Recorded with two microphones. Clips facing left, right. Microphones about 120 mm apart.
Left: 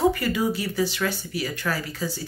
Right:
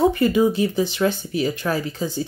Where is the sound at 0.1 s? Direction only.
20° right (ahead or behind).